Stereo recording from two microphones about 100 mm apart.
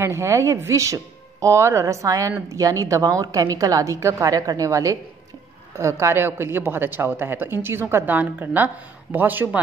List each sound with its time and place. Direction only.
0.0 s a woman's voice: 30° right (ahead or behind)